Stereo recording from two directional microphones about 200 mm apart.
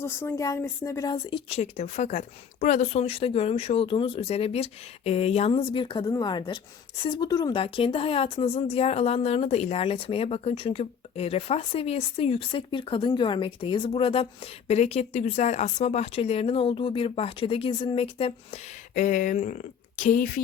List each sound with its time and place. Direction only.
0.0 s speech: 15° left (ahead or behind); by 20.4 s 40° left (ahead or behind)